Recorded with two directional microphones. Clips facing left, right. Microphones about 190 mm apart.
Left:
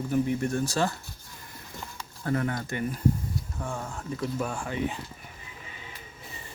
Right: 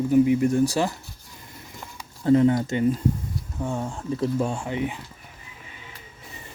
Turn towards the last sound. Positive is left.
turn(degrees=-20)  # may be behind; listen again after turning